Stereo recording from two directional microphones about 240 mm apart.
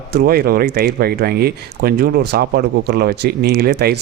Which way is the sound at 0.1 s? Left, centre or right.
Right.